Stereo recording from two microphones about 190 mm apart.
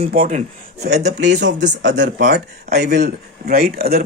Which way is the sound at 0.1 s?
40° right (ahead or behind).